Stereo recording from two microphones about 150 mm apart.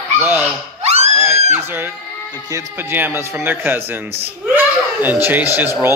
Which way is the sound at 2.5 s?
15° right (ahead or behind).